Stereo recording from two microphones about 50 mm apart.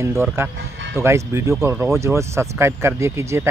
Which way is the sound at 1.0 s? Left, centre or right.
Right.